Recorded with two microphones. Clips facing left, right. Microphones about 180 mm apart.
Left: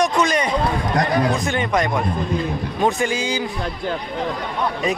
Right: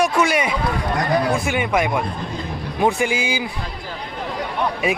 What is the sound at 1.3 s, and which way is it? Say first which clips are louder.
Speech: right 1 dB; 10° right (ahead or behind).